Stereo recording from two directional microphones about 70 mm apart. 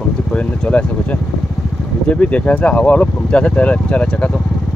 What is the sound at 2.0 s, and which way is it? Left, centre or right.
Speech, centre.